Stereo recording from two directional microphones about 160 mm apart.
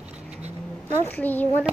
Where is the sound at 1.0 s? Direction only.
10° left (ahead or behind).